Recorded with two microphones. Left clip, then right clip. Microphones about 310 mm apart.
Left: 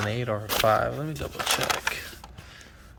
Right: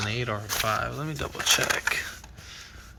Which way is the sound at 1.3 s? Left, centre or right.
Left.